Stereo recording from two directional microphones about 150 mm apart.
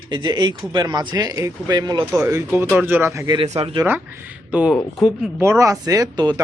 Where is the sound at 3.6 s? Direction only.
35° right (ahead or behind).